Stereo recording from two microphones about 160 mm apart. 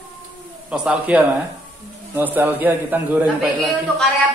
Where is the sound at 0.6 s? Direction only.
5° right (ahead or behind).